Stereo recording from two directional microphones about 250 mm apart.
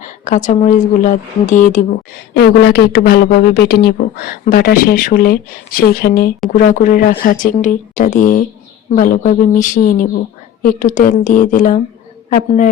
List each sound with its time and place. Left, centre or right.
0.0 s speech: left